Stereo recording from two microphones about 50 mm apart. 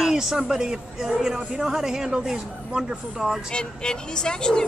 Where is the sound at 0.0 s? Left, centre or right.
Centre.